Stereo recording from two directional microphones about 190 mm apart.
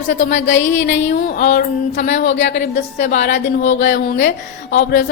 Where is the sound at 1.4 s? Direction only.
50° left (ahead or behind).